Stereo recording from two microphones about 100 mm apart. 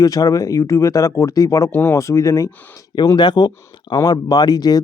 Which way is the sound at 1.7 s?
25° left (ahead or behind).